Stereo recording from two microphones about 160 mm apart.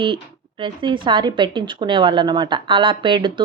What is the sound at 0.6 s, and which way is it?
A woman's voice, 30° right (ahead or behind).